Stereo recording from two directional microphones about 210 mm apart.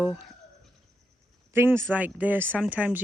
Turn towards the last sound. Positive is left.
turn(degrees=-5)  # may be behind; listen again after turning